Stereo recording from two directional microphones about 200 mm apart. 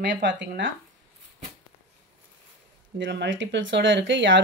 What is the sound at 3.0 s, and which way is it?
A woman's voice, 65° right (ahead or behind).